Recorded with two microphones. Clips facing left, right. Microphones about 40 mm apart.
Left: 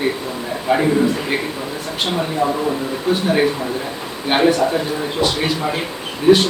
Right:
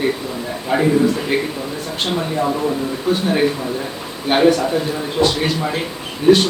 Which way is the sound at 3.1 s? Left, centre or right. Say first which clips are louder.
Even; centre.